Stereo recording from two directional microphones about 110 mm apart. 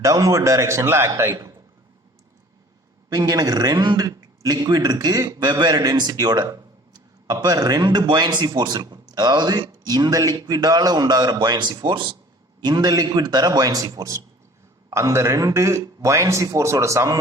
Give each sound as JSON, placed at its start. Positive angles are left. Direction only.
{"t": 0.0, "sound": "speech", "side_deg": -30}
{"t": 3.1, "sound": "speech", "side_deg": -35}
{"t": 12.6, "sound": "speech", "side_deg": -35}